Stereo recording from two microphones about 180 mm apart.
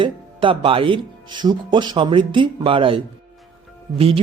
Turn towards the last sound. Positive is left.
turn(degrees=-30)  # may be behind; listen again after turning